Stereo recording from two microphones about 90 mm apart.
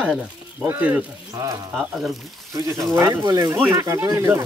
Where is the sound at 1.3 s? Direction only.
35° right (ahead or behind).